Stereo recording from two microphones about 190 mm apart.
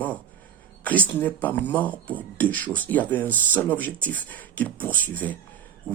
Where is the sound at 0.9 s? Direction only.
10° left (ahead or behind).